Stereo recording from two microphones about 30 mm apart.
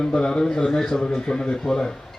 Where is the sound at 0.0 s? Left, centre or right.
Left.